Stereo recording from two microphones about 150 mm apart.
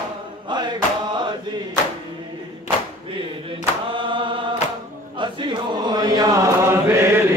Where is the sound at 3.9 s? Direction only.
35° right (ahead or behind).